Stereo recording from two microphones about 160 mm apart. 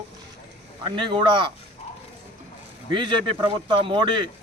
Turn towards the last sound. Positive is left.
turn(degrees=-30)  # may be behind; listen again after turning